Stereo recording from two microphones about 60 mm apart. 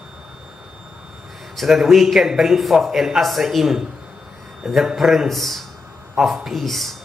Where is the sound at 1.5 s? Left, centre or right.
Centre.